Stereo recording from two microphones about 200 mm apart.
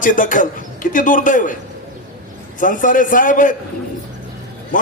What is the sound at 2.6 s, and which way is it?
Speech, 40° left (ahead or behind).